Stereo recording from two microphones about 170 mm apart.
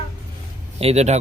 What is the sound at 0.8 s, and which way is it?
Speech, 40° right (ahead or behind).